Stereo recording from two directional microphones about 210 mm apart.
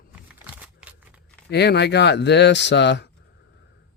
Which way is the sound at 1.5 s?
50° left (ahead or behind).